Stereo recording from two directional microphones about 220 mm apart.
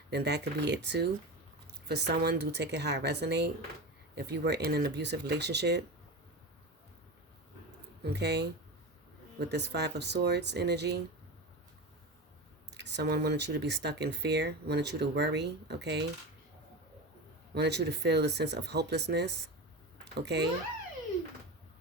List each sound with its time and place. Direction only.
0.1 s speech: 50° right (ahead or behind)
8.0 s speech: 50° right (ahead or behind)
12.7 s speech: 50° right (ahead or behind)
17.5 s speech: 50° right (ahead or behind)